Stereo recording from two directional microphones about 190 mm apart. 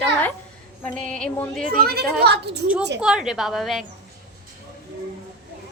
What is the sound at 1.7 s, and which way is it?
Speech, 50° right (ahead or behind).